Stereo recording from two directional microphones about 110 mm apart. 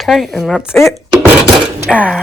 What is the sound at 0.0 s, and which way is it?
Speech, centre (ahead or behind).